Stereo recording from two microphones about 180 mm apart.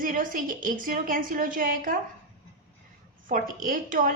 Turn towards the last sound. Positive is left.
turn(degrees=-50)  # may be behind; listen again after turning